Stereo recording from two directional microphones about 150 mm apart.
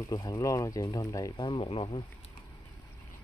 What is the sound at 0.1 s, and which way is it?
Speech, 25° left (ahead or behind).